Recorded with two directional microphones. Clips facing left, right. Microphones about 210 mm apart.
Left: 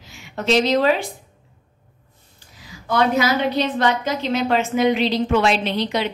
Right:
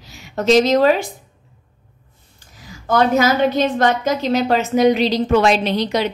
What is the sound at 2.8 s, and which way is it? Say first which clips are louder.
A woman's voice: right 3 dB; 45° right (ahead or behind).